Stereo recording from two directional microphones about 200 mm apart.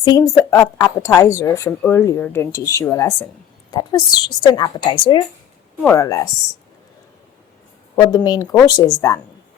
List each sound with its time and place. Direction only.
0.0 s a woman's voice: 20° left (ahead or behind)
7.9 s a woman's voice: 20° left (ahead or behind)